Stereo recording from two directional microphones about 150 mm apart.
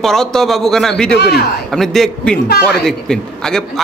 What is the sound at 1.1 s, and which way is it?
Speech, 90° left.